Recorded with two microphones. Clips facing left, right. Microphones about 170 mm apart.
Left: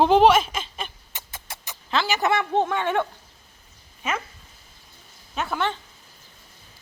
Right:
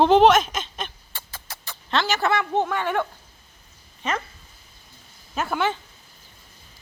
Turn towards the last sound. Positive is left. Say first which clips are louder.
# right 2 dB
turn(degrees=0)  # may be behind; listen again after turning